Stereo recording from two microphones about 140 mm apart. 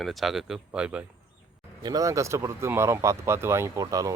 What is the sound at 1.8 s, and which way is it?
Speech, 25° right (ahead or behind).